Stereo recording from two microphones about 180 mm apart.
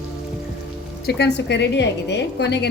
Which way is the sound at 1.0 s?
70° left (ahead or behind).